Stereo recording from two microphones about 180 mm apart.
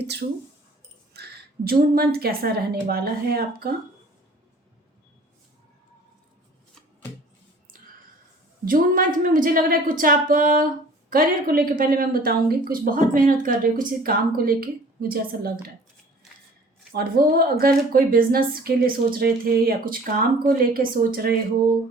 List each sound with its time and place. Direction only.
1.1 s a woman's voice: 60° right (ahead or behind)
8.6 s a woman's voice: 50° right (ahead or behind)
16.9 s a woman's voice: 55° right (ahead or behind)